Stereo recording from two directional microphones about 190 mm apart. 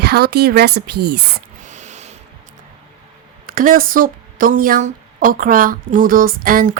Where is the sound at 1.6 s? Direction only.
40° right (ahead or behind).